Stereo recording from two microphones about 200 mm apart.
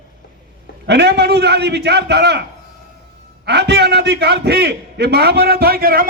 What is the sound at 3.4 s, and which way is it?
A man's voice, 55° right (ahead or behind).